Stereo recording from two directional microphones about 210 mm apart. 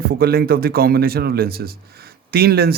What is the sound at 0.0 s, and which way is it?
A man's voice, 45° right (ahead or behind).